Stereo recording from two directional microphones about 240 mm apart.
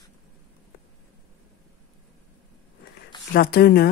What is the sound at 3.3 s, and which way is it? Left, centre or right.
Speech, left.